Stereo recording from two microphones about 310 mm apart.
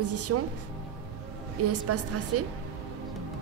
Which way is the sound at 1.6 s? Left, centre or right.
Right.